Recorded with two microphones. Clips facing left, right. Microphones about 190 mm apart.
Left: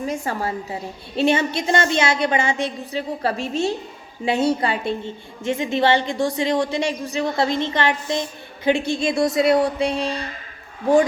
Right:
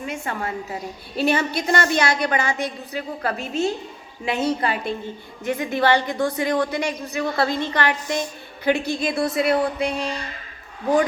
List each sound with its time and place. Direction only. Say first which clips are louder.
0.0 s a woman's voice: left 4 dB; 35° left (ahead or behind)